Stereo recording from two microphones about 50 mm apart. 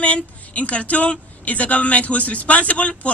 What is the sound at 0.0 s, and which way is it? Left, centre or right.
A woman's voice, left.